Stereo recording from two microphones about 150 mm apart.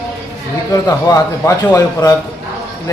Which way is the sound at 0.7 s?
25° left (ahead or behind).